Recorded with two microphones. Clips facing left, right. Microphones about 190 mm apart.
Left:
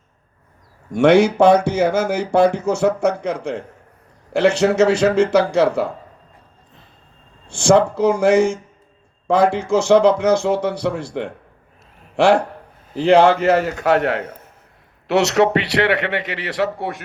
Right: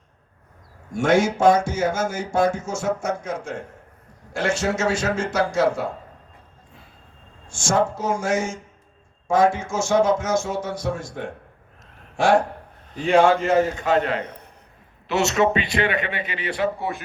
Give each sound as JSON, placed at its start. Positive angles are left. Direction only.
{"t": 0.9, "sound": "speech", "side_deg": 65}
{"t": 7.4, "sound": "a man's voice", "side_deg": 65}
{"t": 14.2, "sound": "a man's voice", "side_deg": 5}
{"t": 15.0, "sound": "a man's voice", "side_deg": 70}